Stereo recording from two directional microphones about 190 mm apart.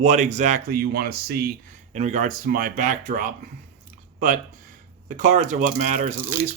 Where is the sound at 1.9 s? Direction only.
40° right (ahead or behind).